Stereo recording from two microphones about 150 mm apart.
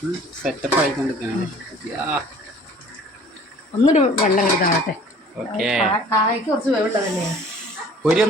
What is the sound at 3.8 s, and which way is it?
Speech, 55° left (ahead or behind).